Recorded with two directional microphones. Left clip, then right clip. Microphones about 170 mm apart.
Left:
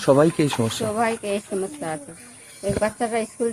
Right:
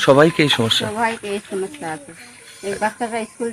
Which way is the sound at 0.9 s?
40° left (ahead or behind).